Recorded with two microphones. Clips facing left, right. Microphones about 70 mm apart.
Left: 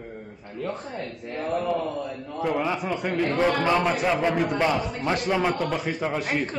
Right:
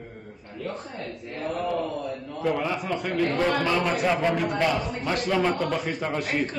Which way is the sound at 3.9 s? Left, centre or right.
Centre.